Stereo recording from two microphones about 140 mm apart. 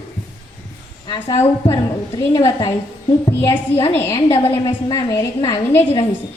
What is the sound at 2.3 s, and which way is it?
Speech, 35° left (ahead or behind).